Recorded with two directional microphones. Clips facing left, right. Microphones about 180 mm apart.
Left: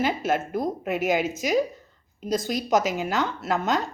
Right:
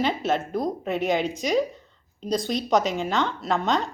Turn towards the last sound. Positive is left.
turn(degrees=5)  # may be behind; listen again after turning